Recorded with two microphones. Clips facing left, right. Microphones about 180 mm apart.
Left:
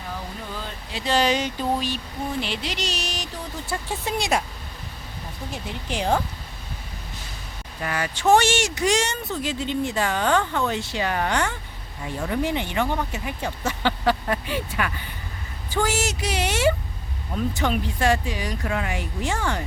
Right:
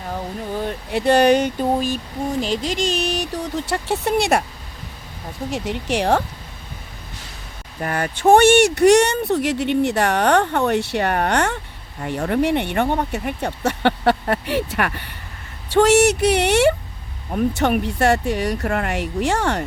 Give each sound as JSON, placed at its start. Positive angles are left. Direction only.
{"t": 0.1, "sound": "speech", "side_deg": -60}
{"t": 5.5, "sound": "speech", "side_deg": -80}
{"t": 7.8, "sound": "speech", "side_deg": -50}